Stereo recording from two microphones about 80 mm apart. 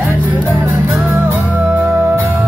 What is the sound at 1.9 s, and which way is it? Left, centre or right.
Music, right.